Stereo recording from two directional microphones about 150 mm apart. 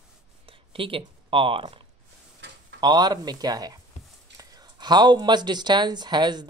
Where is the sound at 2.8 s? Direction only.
25° right (ahead or behind).